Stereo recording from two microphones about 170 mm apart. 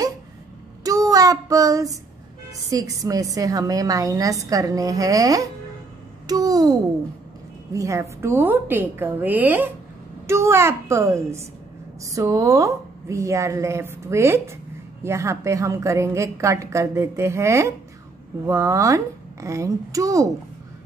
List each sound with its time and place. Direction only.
0.8 s child singing: 20° right (ahead or behind)
2.7 s a woman's voice: 20° right (ahead or behind)